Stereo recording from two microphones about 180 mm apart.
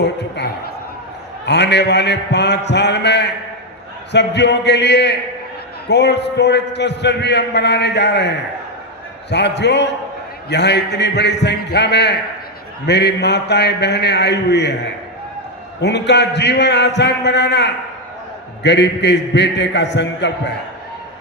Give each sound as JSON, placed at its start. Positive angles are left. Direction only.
{"t": 0.0, "sound": "a man's voice", "side_deg": 70}
{"t": 9.3, "sound": "a man's voice", "side_deg": 70}
{"t": 15.8, "sound": "a man's voice", "side_deg": 70}